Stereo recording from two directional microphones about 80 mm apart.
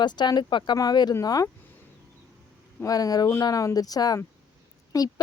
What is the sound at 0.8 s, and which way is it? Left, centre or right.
Speech, left.